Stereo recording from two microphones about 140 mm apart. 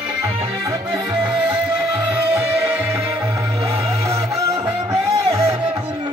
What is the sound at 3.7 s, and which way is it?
Music, 20° right (ahead or behind).